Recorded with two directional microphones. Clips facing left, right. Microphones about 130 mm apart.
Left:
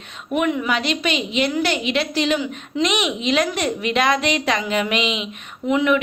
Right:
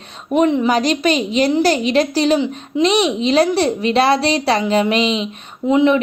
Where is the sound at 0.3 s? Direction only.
30° right (ahead or behind).